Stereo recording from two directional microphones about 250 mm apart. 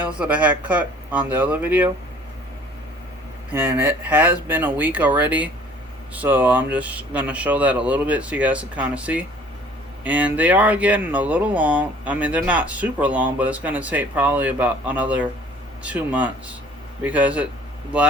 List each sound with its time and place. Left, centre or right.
0.2 s speech: centre
3.5 s speech: centre